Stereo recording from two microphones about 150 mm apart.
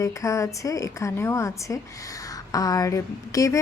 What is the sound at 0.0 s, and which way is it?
Speech, 20° left (ahead or behind).